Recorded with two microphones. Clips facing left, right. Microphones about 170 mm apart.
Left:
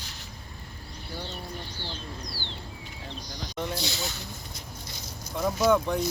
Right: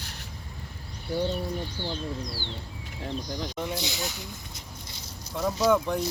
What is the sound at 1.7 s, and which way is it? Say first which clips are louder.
Speech: right 6 dB; 50° right (ahead or behind).